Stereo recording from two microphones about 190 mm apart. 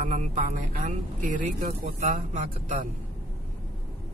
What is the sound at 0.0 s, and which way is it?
Speech, 40° right (ahead or behind).